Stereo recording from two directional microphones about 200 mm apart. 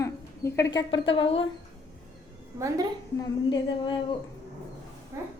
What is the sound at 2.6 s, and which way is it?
Speech, 15° right (ahead or behind).